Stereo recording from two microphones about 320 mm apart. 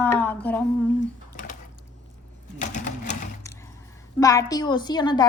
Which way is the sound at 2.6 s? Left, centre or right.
Left.